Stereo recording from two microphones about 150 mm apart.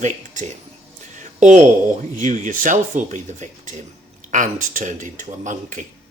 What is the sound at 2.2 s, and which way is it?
Speech, 55° right (ahead or behind).